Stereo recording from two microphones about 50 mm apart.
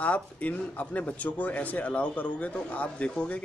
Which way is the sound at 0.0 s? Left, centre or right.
Left.